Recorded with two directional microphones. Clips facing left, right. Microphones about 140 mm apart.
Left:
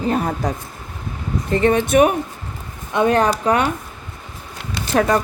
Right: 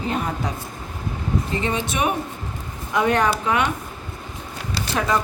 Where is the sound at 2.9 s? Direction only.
30° left (ahead or behind).